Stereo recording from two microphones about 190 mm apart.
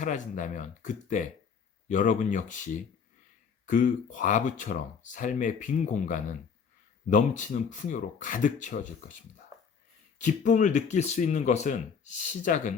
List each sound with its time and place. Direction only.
0.0 s speech: 40° left (ahead or behind)
10.2 s speech: 40° left (ahead or behind)